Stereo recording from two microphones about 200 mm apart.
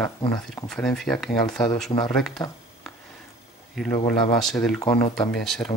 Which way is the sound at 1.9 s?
25° left (ahead or behind).